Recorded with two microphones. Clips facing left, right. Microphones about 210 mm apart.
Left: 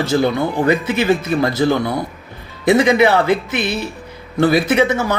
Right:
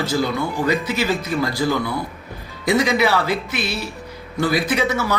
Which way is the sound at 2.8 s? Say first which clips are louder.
Left 4 dB; 55° left (ahead or behind).